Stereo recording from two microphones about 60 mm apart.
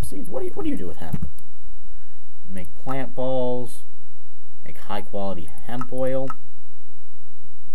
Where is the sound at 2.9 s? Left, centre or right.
Centre.